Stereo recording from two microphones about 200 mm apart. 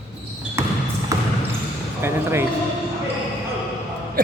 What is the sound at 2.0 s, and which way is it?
Speech, 10° right (ahead or behind).